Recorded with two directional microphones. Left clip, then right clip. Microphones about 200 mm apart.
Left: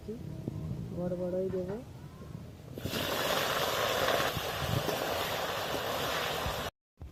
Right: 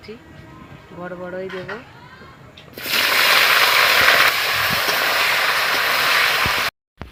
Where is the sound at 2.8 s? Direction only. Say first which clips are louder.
Right 17 dB; 20° right (ahead or behind).